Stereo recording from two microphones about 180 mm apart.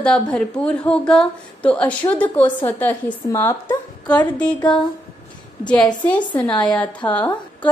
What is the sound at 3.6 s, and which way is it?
A woman's voice, 25° left (ahead or behind).